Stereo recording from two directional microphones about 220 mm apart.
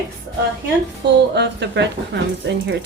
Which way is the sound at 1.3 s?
50° right (ahead or behind).